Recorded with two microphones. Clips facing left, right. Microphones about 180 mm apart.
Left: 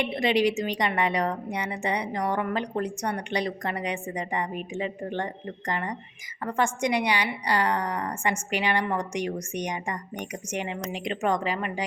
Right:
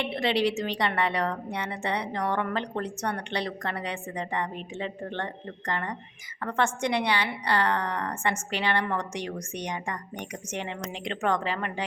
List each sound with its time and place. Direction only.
0.0 s a woman's voice: 15° left (ahead or behind)